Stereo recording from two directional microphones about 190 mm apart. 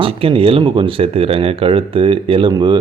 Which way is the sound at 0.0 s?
30° right (ahead or behind).